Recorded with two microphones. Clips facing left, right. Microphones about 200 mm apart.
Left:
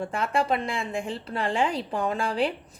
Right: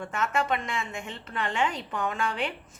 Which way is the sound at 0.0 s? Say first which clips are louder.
Left 3 dB; 30° left (ahead or behind).